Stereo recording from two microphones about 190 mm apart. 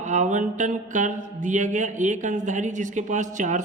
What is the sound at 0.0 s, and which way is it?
Speech, 40° right (ahead or behind).